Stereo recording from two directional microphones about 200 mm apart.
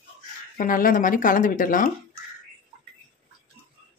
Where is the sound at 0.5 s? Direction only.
45° left (ahead or behind).